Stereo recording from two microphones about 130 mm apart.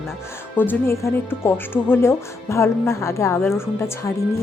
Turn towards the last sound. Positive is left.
turn(degrees=20)  # may be behind; listen again after turning